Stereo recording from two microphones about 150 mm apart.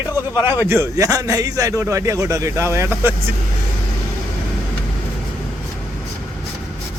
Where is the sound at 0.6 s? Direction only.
15° right (ahead or behind).